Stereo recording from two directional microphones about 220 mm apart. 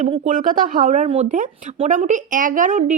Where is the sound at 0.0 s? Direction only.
30° right (ahead or behind).